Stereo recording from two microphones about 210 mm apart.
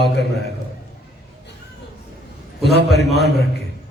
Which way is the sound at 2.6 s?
50° left (ahead or behind).